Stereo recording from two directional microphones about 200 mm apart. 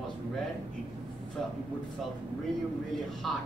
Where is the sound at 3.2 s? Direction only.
Centre (ahead or behind).